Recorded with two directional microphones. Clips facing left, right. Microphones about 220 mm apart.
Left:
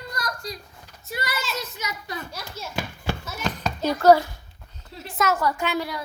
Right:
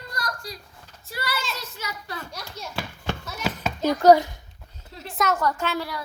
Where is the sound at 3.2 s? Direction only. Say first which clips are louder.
Left 1 dB; centre (ahead or behind).